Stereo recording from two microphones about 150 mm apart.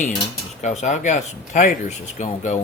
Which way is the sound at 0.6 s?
55° left (ahead or behind).